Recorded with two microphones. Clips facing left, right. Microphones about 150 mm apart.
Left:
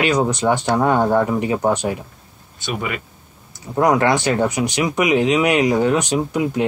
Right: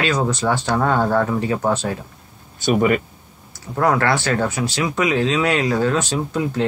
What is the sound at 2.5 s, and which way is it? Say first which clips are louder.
Speech: right 9 dB; 45° right (ahead or behind).